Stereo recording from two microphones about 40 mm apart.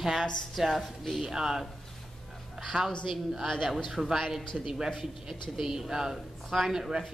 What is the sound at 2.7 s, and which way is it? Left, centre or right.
Speech, right.